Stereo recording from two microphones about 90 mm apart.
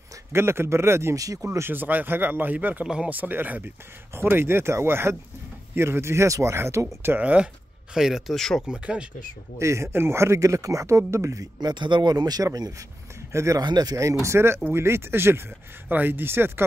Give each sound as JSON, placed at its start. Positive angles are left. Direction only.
{"t": 0.3, "sound": "speech", "side_deg": -30}
{"t": 1.4, "sound": "speech", "side_deg": -25}
{"t": 7.9, "sound": "speech", "side_deg": -5}
{"t": 8.4, "sound": "speech", "side_deg": 5}
{"t": 8.6, "sound": "speech", "side_deg": -10}
{"t": 9.6, "sound": "speech", "side_deg": -30}
{"t": 11.6, "sound": "speech", "side_deg": -60}
{"t": 13.3, "sound": "speech", "side_deg": -35}
{"t": 13.6, "sound": "speech", "side_deg": -50}
{"t": 14.2, "sound": "speech", "side_deg": -30}